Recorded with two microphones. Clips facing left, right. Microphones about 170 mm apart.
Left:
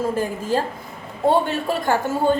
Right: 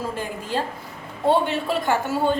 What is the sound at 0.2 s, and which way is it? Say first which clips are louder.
A woman's voice: left 5 dB; 45° left (ahead or behind).